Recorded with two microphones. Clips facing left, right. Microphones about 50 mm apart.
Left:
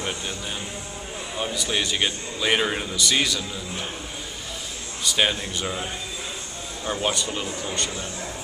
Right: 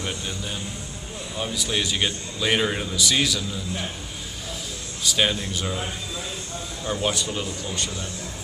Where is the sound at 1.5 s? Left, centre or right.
Centre.